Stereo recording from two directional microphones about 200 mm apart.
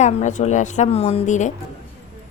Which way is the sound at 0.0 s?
35° left (ahead or behind).